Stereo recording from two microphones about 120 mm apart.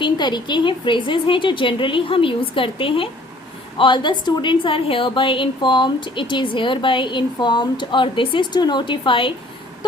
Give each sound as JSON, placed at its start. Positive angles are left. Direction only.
{"t": 0.0, "sound": "a woman's voice", "side_deg": 40}